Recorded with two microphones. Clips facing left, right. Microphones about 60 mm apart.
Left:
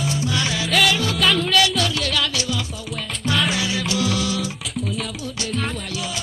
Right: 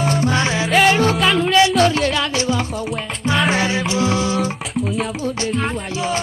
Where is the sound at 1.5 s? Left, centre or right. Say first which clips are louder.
Right 6 dB; right.